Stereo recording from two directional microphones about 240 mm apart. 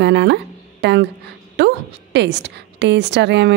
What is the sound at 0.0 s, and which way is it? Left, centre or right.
Speech, right.